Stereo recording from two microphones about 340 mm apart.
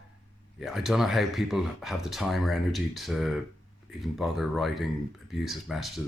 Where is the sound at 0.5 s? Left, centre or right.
Centre.